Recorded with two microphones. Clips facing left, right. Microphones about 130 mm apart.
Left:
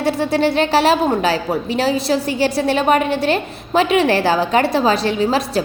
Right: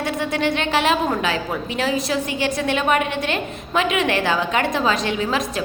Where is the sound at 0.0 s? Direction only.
35° left (ahead or behind).